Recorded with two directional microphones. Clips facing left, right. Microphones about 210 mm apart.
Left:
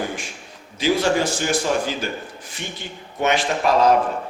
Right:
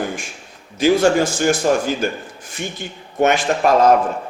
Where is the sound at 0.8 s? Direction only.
45° right (ahead or behind).